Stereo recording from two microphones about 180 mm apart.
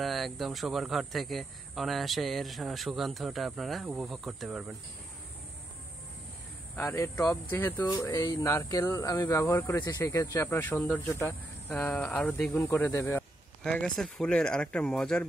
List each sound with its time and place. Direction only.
0.0 s speech: centre (ahead or behind)
6.7 s speech: 15° left (ahead or behind)